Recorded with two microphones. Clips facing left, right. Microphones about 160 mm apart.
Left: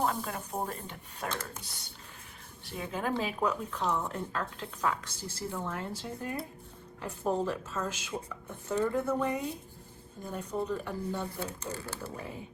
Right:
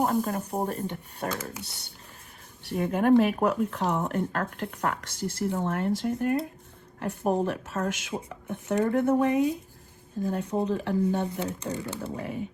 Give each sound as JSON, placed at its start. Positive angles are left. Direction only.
{"t": 0.0, "sound": "speech", "side_deg": -45}
{"t": 1.3, "sound": "speech", "side_deg": -10}
{"t": 2.6, "sound": "speech", "side_deg": -55}